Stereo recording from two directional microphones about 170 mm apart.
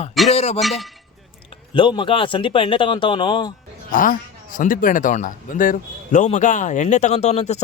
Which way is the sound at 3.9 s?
55° left (ahead or behind).